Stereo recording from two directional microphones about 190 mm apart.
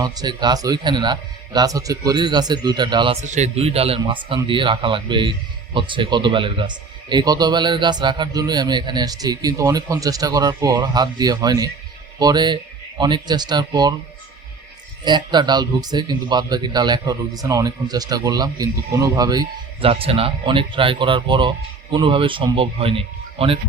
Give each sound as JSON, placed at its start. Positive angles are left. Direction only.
{"t": 0.0, "sound": "speech", "side_deg": -20}
{"t": 15.0, "sound": "speech", "side_deg": -25}